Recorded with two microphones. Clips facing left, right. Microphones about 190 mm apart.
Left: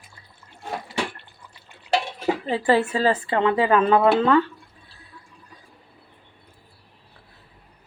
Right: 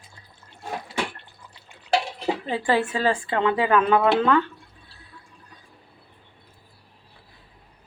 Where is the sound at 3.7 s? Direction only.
30° left (ahead or behind).